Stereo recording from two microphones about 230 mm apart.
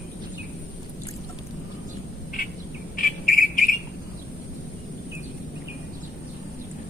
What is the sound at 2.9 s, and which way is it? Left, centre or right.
Cricket, left.